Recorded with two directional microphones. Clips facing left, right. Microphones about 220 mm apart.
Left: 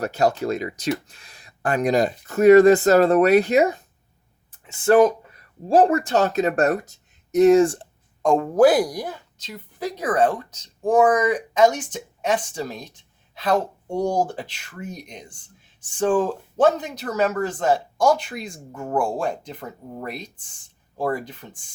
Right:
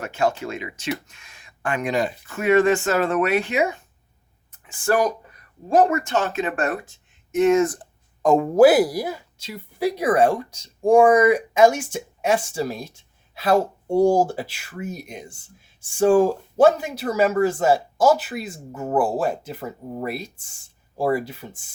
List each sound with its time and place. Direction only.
0.0 s speech: 40° left (ahead or behind)
4.5 s speech: 25° left (ahead or behind)
8.2 s speech: 5° right (ahead or behind)